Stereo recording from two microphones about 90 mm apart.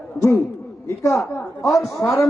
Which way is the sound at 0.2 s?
25° left (ahead or behind).